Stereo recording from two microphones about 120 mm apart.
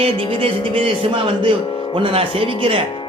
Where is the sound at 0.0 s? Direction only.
50° right (ahead or behind).